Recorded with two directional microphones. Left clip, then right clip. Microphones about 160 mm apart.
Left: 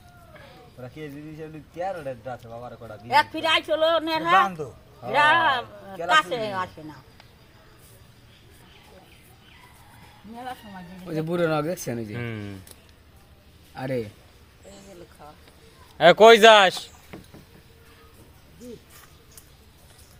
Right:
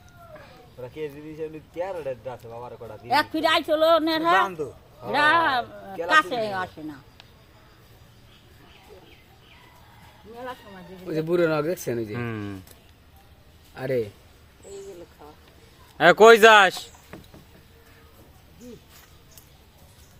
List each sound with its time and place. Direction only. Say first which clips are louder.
0.9 s speech: right 6 dB; 30° right (ahead or behind)
3.1 s a man's voice: left 1 dB; 45° right (ahead or behind)
4.4 s a man's voice: even; 35° right (ahead or behind)
5.1 s a man's voice: left 1 dB; 45° right (ahead or behind)
11.0 s speech: right 3 dB; 25° right (ahead or behind)
13.7 s speech: right 3 dB; 25° right (ahead or behind)
16.0 s speech: even; 25° right (ahead or behind)